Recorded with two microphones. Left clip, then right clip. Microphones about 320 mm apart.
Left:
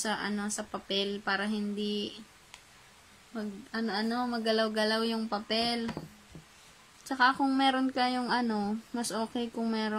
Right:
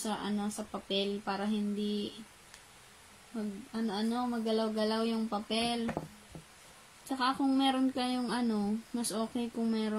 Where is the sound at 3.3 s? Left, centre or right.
Left.